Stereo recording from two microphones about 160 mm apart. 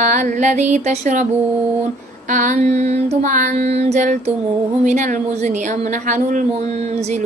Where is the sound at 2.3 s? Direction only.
50° right (ahead or behind).